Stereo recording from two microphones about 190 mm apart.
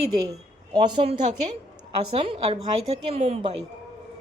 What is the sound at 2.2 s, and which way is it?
Speech, 30° right (ahead or behind).